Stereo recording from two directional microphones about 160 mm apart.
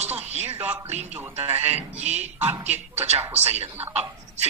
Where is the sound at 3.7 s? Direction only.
10° right (ahead or behind).